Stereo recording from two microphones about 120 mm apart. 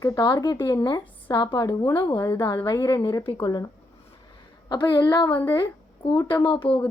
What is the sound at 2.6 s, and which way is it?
A woman's voice, 35° left (ahead or behind).